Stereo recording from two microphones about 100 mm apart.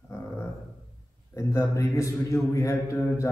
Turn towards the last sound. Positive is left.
turn(degrees=30)  # may be behind; listen again after turning